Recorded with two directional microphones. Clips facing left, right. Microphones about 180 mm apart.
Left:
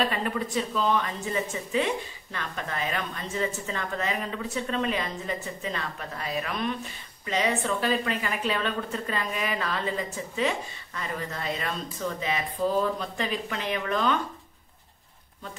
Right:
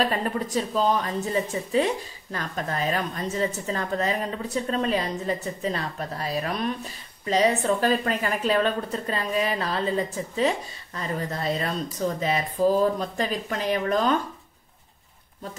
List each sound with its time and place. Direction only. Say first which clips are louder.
0.1 s a woman's voice: right 3 dB; 40° right (ahead or behind)